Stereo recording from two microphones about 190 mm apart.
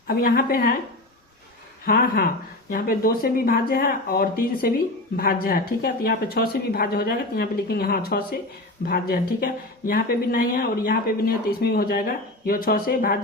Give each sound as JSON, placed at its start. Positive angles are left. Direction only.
{"t": 0.1, "sound": "a woman's voice", "side_deg": 50}
{"t": 1.8, "sound": "a woman's voice", "side_deg": 50}